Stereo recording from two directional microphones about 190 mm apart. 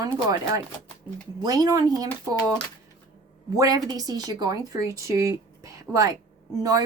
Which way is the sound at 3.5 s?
20° right (ahead or behind).